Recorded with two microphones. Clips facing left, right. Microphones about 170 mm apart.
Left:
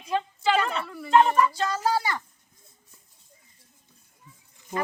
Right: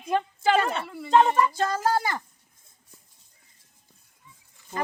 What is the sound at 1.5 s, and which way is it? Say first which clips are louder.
Speech: right 1 dB; 50° right (ahead or behind).